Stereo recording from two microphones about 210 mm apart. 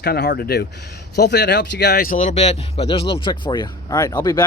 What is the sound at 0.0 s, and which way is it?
Speech, 50° left (ahead or behind).